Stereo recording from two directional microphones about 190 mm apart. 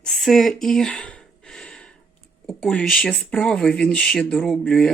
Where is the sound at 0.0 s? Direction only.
Centre (ahead or behind).